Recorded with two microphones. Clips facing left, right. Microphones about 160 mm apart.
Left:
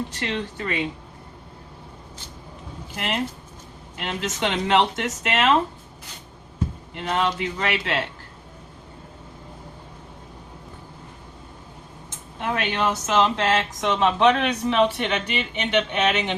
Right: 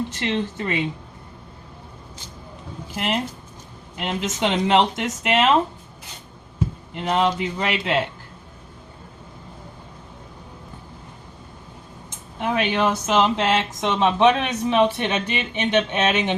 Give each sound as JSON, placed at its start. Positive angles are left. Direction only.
{"t": 0.1, "sound": "speech", "side_deg": -20}
{"t": 4.0, "sound": "speech", "side_deg": -20}
{"t": 6.9, "sound": "speech", "side_deg": -20}
{"t": 12.4, "sound": "speech", "side_deg": -15}